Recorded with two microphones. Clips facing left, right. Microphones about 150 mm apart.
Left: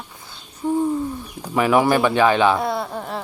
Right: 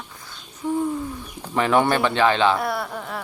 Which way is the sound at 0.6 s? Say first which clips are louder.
Left 3 dB; 35° left (ahead or behind).